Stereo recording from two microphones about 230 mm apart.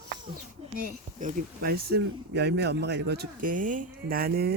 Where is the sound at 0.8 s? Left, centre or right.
Right.